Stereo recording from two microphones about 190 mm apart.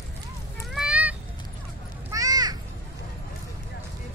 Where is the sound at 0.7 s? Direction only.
5° right (ahead or behind).